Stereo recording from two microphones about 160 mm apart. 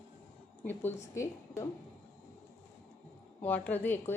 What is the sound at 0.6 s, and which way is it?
A woman's voice, 15° left (ahead or behind).